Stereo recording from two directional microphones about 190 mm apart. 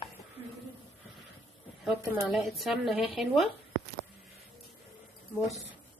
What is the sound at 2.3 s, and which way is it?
A woman's voice, centre (ahead or behind).